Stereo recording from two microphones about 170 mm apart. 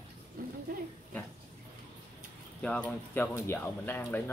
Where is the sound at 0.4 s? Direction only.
60° right (ahead or behind).